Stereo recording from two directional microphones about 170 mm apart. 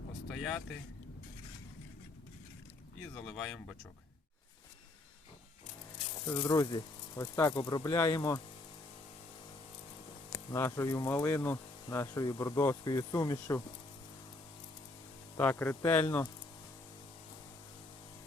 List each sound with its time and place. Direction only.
0.3 s speech: 5° left (ahead or behind)
3.2 s speech: 5° left (ahead or behind)
6.2 s speech: 15° left (ahead or behind)
10.5 s speech: 15° left (ahead or behind)
15.4 s speech: 10° left (ahead or behind)